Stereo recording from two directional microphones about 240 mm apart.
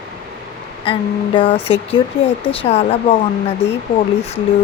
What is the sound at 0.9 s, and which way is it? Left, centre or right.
Speech, left.